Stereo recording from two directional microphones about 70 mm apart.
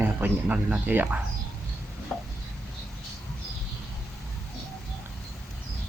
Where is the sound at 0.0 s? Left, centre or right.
Right.